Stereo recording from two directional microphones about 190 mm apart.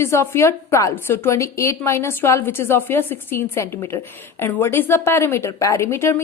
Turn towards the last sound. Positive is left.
turn(degrees=15)  # may be behind; listen again after turning